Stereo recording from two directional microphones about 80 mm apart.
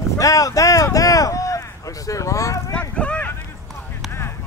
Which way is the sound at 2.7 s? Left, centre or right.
Centre.